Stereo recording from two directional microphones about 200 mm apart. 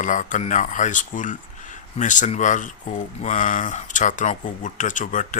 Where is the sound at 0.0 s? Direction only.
40° left (ahead or behind).